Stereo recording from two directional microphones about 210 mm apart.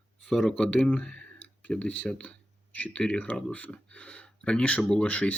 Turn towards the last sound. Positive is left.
turn(degrees=5)  # may be behind; listen again after turning